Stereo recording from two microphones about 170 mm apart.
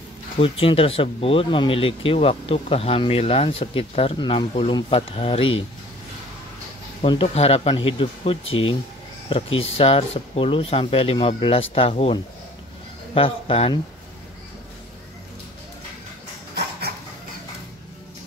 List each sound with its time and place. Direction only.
0.4 s speech: 30° left (ahead or behind)
7.1 s speech: 35° left (ahead or behind)